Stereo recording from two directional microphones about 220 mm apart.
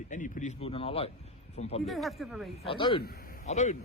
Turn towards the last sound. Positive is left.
turn(degrees=35)  # may be behind; listen again after turning